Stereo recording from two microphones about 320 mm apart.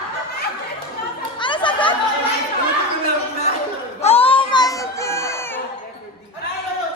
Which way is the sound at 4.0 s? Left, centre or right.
Centre.